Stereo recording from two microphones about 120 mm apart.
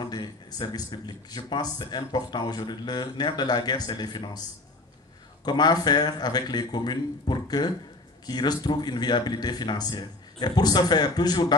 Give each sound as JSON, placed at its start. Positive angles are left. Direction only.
{"t": 0.0, "sound": "speech", "side_deg": 35}